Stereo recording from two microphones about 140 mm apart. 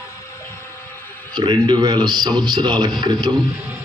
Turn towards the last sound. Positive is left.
turn(degrees=-30)  # may be behind; listen again after turning